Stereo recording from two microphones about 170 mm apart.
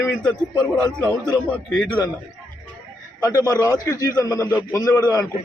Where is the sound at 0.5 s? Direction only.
25° left (ahead or behind).